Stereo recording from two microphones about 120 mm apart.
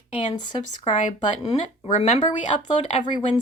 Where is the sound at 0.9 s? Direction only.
90° left.